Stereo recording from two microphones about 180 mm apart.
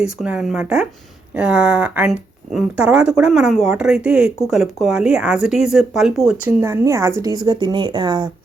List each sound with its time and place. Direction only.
0.0 s speech: 5° right (ahead or behind)
6.4 s speech: 15° right (ahead or behind)